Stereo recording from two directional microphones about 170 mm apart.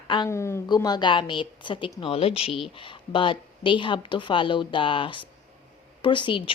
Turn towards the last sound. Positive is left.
turn(degrees=30)  # may be behind; listen again after turning